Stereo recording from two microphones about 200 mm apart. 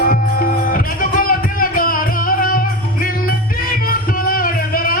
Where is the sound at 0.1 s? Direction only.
45° left (ahead or behind).